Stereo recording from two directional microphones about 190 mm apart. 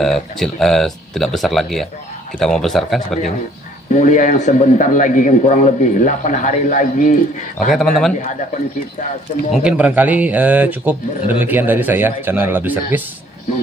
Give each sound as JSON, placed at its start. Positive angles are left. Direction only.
{"t": 0.0, "sound": "speech", "side_deg": 0}
{"t": 3.9, "sound": "a man's voice", "side_deg": 40}
{"t": 7.5, "sound": "speech", "side_deg": 0}
{"t": 9.5, "sound": "speech", "side_deg": -5}